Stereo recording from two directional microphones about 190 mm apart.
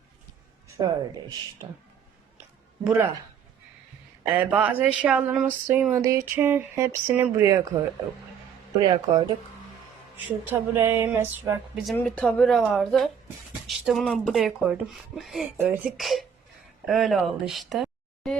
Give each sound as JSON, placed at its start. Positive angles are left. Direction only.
{"t": 0.8, "sound": "speech", "side_deg": -20}
{"t": 2.8, "sound": "speech", "side_deg": -10}
{"t": 4.4, "sound": "speech", "side_deg": -10}
{"t": 8.8, "sound": "speech", "side_deg": -20}
{"t": 10.4, "sound": "speech", "side_deg": -10}
{"t": 11.9, "sound": "speech", "side_deg": 5}